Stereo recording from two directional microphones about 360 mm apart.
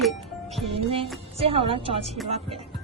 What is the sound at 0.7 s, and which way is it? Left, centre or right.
A woman's voice, centre.